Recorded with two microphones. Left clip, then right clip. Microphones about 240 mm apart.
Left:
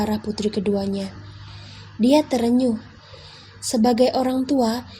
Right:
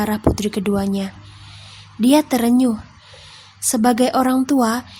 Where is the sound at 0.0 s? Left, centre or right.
Right.